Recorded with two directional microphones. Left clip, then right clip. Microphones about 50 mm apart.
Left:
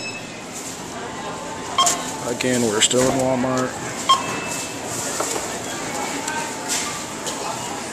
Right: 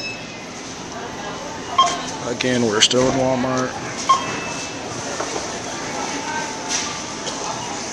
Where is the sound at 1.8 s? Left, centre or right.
Left.